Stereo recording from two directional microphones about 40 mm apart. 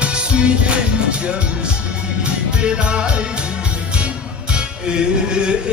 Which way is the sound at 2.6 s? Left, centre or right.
Right.